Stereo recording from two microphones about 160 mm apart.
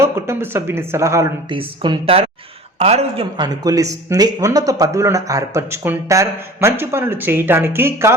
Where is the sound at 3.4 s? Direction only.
20° right (ahead or behind).